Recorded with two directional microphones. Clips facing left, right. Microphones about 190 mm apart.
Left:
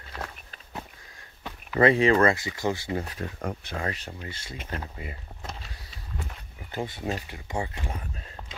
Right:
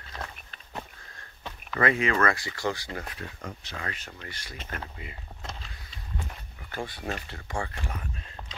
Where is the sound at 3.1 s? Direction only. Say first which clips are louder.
Left 6 dB; 50° left (ahead or behind).